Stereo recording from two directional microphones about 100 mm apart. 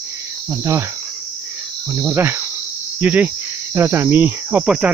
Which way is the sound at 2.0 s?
25° right (ahead or behind).